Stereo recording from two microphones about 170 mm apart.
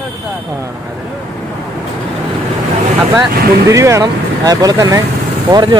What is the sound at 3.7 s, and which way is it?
Speech, 20° right (ahead or behind).